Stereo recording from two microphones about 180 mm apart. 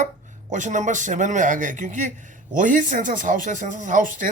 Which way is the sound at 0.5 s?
45° right (ahead or behind).